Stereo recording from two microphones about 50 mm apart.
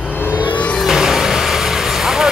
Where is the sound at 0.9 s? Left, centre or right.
Centre.